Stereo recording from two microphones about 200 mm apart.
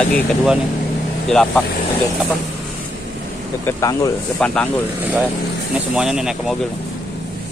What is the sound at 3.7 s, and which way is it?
Speech, 15° left (ahead or behind).